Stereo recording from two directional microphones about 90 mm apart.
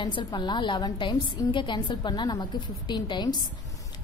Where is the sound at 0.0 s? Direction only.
60° left (ahead or behind).